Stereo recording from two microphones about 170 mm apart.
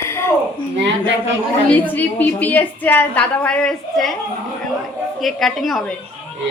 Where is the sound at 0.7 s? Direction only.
90° right.